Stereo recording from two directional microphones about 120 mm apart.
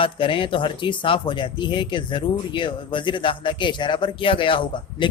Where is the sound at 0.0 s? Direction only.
45° left (ahead or behind).